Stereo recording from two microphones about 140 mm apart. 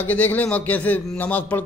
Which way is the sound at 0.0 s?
10° left (ahead or behind).